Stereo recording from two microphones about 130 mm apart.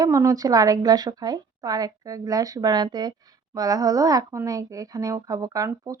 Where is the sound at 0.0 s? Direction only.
25° right (ahead or behind).